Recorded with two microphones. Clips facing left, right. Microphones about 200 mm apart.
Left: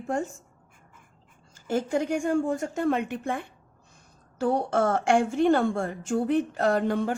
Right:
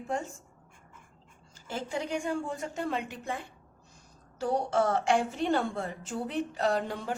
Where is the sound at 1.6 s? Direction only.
50° left (ahead or behind).